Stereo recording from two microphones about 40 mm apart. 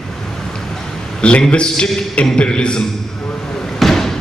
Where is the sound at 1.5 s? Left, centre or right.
Left.